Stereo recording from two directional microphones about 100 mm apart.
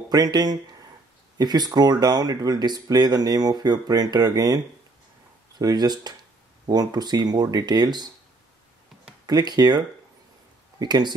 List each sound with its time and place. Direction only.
0.1 s speech: 40° right (ahead or behind)
5.6 s speech: 40° right (ahead or behind)
9.2 s speech: 45° right (ahead or behind)